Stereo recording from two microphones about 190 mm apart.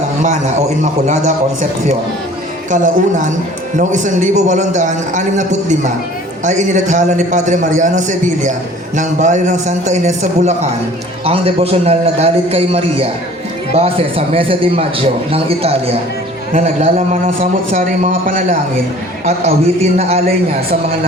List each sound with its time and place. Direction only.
0.8 s a man's voice: 40° right (ahead or behind)
2.6 s a man's voice: 40° right (ahead or behind)